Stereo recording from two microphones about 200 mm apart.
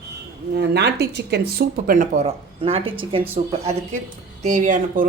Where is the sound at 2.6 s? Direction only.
25° right (ahead or behind).